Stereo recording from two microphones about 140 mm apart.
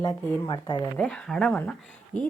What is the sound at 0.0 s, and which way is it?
Speech, 30° left (ahead or behind).